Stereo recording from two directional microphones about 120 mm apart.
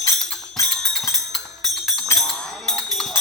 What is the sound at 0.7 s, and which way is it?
Music, 5° left (ahead or behind).